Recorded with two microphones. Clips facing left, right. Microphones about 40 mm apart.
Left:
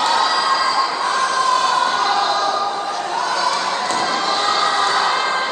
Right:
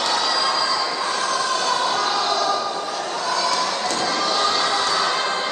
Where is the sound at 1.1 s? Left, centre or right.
Left.